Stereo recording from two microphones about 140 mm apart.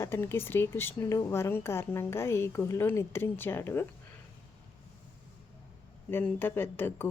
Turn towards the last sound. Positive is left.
turn(degrees=15)  # may be behind; listen again after turning